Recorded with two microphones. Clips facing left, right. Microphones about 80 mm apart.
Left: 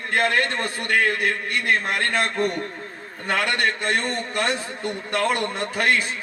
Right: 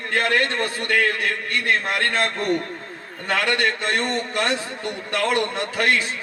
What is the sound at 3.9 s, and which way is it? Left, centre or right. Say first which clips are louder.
A man's voice: right 1 dB; right.